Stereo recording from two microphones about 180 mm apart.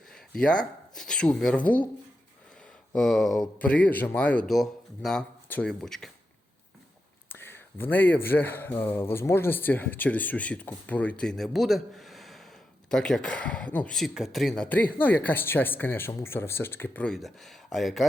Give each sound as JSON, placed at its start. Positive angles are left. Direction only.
{"t": 0.1, "sound": "speech", "side_deg": 5}
{"t": 2.9, "sound": "speech", "side_deg": 5}
{"t": 7.3, "sound": "speech", "side_deg": 10}